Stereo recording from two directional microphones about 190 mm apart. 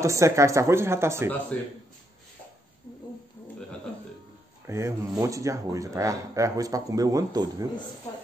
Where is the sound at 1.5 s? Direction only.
10° left (ahead or behind).